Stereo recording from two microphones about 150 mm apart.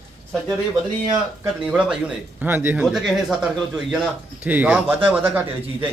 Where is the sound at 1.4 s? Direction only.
10° right (ahead or behind).